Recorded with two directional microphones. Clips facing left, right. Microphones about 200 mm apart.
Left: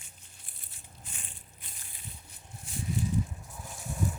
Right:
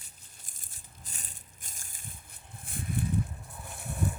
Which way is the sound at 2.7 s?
55° right (ahead or behind).